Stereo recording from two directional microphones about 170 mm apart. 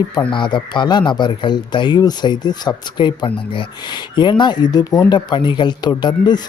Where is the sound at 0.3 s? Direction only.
30° left (ahead or behind).